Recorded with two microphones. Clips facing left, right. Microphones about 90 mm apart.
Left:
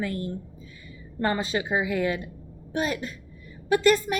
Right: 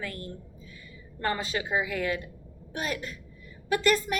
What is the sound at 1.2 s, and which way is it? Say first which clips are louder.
A woman's voice: left 4 dB; 25° left (ahead or behind).